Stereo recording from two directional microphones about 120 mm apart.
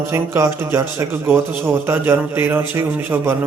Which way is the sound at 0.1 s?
25° right (ahead or behind).